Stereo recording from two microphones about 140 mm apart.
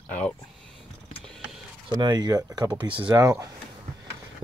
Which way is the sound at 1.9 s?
30° right (ahead or behind).